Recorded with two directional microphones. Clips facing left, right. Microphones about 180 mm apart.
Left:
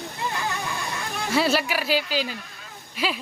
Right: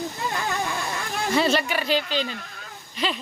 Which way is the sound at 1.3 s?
5° left (ahead or behind).